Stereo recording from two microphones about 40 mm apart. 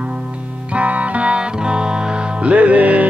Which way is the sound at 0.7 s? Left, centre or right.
Right.